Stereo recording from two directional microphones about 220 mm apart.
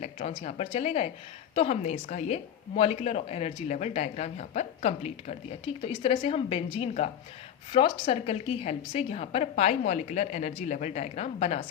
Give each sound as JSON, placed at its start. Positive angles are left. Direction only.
{"t": 0.0, "sound": "a woman's voice", "side_deg": 30}